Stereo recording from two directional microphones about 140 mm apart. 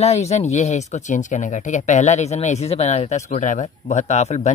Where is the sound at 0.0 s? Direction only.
50° left (ahead or behind).